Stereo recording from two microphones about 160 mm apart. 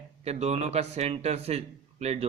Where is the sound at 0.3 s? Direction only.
40° right (ahead or behind).